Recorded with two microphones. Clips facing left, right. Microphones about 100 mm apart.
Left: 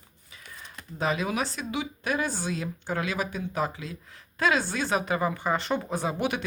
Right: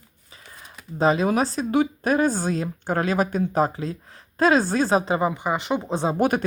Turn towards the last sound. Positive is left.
turn(degrees=-45)  # may be behind; listen again after turning